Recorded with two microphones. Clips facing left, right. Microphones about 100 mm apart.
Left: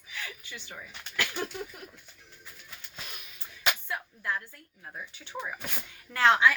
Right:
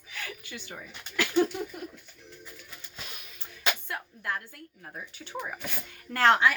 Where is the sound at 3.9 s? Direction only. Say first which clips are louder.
Left 1 dB; 55° right (ahead or behind).